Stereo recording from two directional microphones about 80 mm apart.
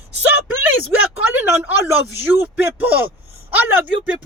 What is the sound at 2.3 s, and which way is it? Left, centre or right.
Speech, right.